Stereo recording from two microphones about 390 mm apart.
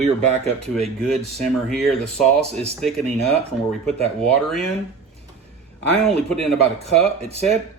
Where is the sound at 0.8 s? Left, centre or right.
Centre.